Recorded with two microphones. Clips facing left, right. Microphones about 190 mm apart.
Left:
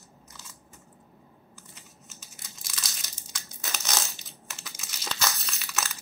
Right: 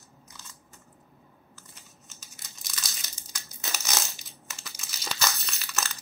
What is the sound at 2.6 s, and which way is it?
Crushing, centre (ahead or behind).